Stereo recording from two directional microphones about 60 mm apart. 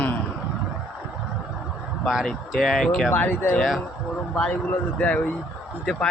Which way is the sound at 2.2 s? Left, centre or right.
Centre.